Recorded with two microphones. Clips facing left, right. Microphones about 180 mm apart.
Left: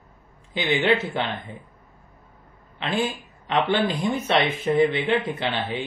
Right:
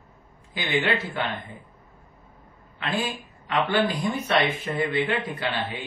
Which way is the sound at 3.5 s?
20° left (ahead or behind).